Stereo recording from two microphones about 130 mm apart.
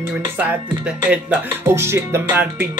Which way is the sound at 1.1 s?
15° right (ahead or behind).